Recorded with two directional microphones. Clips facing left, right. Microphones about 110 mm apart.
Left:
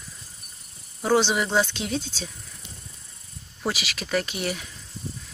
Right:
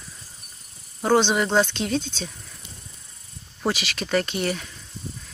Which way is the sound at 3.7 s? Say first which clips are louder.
Right 3 dB; 5° left (ahead or behind).